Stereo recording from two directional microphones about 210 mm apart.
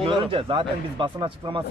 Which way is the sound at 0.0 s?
25° right (ahead or behind).